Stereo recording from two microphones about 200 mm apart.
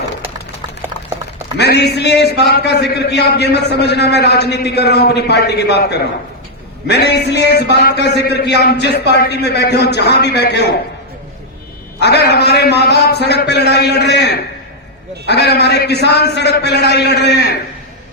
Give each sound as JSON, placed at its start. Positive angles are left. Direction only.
{"t": 1.5, "sound": "a man's voice", "side_deg": 55}
{"t": 11.9, "sound": "a man's voice", "side_deg": 55}